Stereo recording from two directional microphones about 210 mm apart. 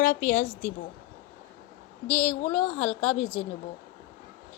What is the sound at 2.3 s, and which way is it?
Speech, 25° left (ahead or behind).